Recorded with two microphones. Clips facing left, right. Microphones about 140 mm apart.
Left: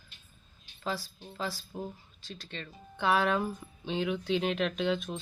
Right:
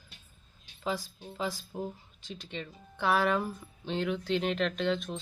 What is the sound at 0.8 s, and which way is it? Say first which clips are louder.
Speech: right 2 dB; 15° right (ahead or behind).